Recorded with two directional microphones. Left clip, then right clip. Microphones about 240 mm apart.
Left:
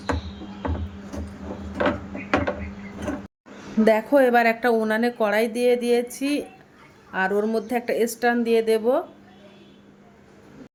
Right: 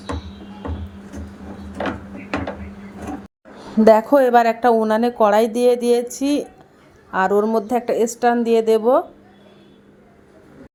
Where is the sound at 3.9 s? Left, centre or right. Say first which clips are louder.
Right 5 dB; centre.